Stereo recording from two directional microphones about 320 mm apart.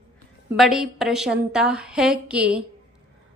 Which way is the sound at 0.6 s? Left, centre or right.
Centre.